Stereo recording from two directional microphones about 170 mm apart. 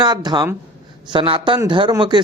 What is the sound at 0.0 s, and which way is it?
Speech, 25° right (ahead or behind).